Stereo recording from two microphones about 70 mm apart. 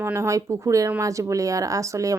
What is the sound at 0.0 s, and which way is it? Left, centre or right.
Speech, right.